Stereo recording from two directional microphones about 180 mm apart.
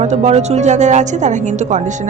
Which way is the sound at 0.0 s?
40° right (ahead or behind).